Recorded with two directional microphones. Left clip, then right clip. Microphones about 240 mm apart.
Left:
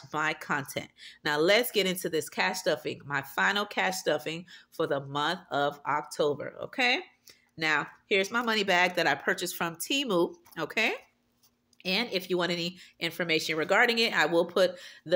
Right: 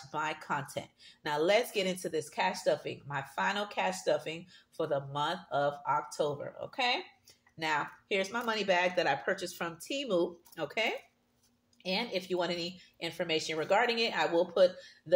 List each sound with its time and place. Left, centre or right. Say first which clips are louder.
0.1 s speech: left 5 dB; left